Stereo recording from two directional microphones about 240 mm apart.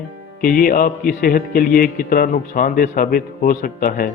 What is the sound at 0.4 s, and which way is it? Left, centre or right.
Speech, left.